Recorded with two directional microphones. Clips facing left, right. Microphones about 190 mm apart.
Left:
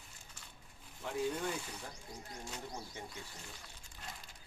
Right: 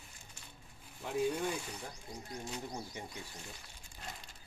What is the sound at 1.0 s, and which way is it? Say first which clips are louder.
Speech: right 3 dB; 10° right (ahead or behind).